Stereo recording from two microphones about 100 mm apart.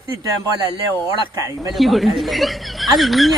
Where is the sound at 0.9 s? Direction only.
30° right (ahead or behind).